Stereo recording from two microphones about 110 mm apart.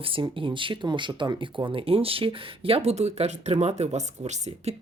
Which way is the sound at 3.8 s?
90° right.